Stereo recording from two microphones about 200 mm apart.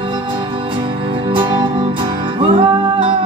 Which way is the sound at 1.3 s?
25° right (ahead or behind).